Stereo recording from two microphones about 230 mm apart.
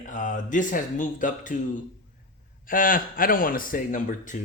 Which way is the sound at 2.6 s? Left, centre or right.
Left.